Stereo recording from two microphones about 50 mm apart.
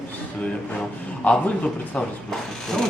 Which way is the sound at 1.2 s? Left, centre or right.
Left.